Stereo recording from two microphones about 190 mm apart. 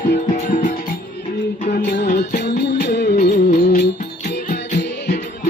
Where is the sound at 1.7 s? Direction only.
65° left (ahead or behind).